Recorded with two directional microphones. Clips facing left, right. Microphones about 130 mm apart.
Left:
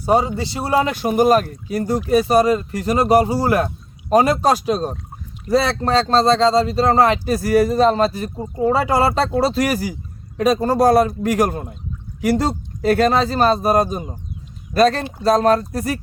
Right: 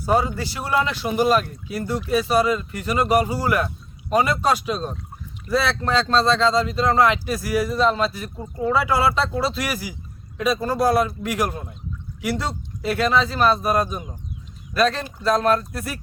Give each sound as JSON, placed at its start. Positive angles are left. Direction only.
{"t": 0.0, "sound": "speech", "side_deg": 25}